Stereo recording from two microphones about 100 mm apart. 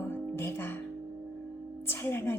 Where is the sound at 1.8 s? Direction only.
25° left (ahead or behind).